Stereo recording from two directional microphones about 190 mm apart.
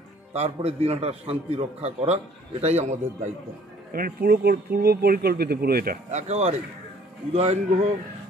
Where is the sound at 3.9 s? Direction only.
50° right (ahead or behind); by 7.9 s 35° right (ahead or behind).